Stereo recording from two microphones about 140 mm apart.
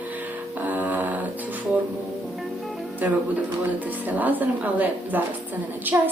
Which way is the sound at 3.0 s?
15° right (ahead or behind).